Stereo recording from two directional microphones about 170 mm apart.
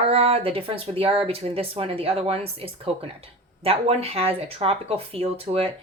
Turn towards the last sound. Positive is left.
turn(degrees=-35)  # may be behind; listen again after turning